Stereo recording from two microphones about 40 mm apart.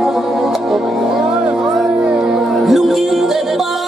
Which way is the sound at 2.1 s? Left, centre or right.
Centre.